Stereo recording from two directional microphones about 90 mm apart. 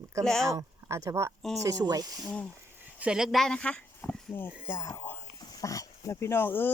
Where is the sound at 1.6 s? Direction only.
45° right (ahead or behind).